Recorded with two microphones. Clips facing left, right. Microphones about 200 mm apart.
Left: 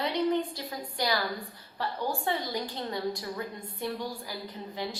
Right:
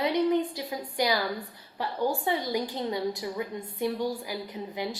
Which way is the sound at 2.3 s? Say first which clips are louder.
Right 3 dB; 15° right (ahead or behind).